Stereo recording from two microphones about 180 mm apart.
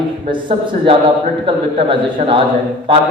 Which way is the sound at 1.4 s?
30° right (ahead or behind).